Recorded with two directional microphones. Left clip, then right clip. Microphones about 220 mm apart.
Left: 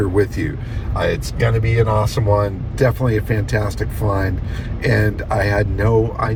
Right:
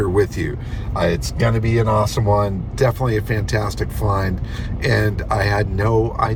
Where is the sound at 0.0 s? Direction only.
20° right (ahead or behind).